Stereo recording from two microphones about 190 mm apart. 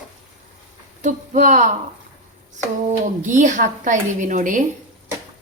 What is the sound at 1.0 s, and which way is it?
Speech, 40° right (ahead or behind).